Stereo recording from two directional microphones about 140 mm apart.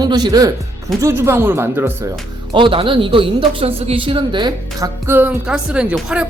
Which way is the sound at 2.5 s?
35° right (ahead or behind).